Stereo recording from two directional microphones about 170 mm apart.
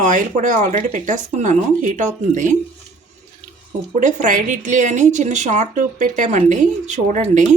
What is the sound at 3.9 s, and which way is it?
Speech, 45° right (ahead or behind).